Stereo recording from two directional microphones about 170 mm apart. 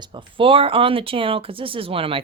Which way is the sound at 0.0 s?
30° right (ahead or behind).